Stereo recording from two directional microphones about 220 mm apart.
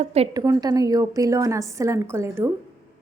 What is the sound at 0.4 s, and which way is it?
A woman's voice, 15° right (ahead or behind).